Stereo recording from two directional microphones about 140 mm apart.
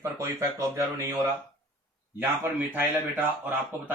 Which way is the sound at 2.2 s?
15° right (ahead or behind).